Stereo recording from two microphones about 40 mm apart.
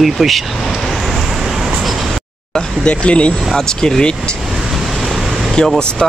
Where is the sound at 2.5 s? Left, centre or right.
Left.